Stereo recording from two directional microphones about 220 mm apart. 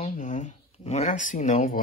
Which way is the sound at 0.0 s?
35° left (ahead or behind).